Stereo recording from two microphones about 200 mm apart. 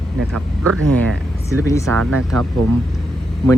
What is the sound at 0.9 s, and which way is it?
Speech, 5° left (ahead or behind).